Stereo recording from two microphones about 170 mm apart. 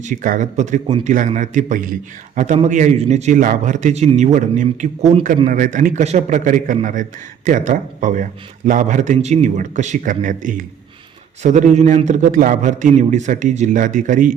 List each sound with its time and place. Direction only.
0.0 s speech: 50° right (ahead or behind)